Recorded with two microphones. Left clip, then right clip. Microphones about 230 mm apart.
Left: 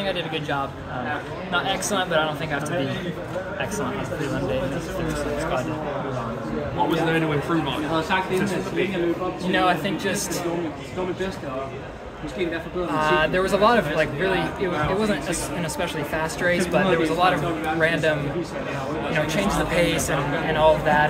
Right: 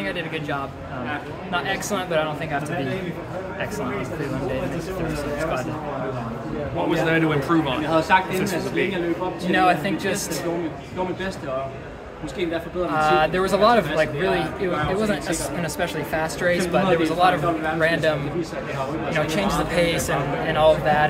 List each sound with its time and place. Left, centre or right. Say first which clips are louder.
1.5 s speech: left 1 dB; centre
6.9 s a man's voice: right 5 dB; right
9.5 s a man's voice: right 2 dB; centre
12.9 s a man's voice: right 1 dB; centre
19.1 s a man's voice: right 1 dB; centre